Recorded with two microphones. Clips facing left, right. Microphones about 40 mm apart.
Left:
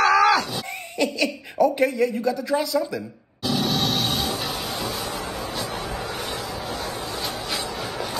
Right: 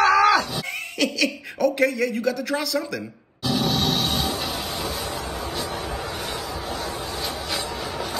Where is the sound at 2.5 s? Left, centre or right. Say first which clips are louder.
Left 3 dB; centre.